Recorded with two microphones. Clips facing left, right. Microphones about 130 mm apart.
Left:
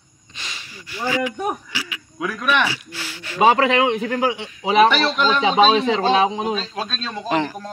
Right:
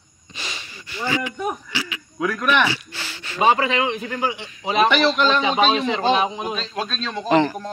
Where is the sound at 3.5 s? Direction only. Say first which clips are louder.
Left 3 dB; 75° left (ahead or behind).